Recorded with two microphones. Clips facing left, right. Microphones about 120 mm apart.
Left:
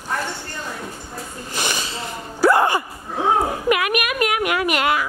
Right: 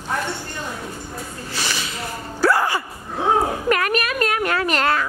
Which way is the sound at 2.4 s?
20° left (ahead or behind).